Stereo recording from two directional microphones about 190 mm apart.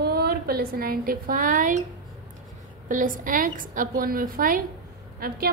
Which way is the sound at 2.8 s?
45° right (ahead or behind).